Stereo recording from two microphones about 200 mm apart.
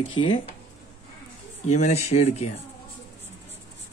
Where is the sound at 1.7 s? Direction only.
35° left (ahead or behind).